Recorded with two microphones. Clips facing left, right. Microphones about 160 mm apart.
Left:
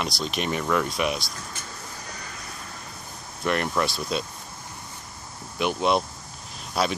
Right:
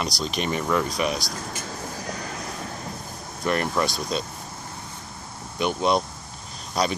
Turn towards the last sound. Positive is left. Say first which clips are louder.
# right 1 dB
turn(degrees=5)  # may be behind; listen again after turning